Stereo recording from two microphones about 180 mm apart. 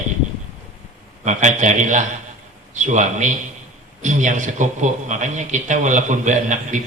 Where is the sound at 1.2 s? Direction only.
40° right (ahead or behind).